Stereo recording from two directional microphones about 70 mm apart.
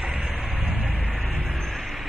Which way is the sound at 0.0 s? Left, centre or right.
Centre.